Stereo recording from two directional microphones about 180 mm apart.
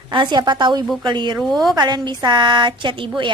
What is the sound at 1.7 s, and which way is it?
A woman's voice, 25° right (ahead or behind).